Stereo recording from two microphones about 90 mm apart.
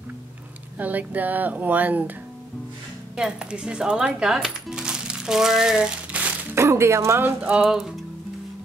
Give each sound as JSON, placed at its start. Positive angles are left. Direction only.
{"t": 0.7, "sound": "a woman's voice", "side_deg": -20}
{"t": 3.2, "sound": "speech", "side_deg": -10}
{"t": 6.5, "sound": "speech", "side_deg": -30}
{"t": 7.6, "sound": "music", "side_deg": -5}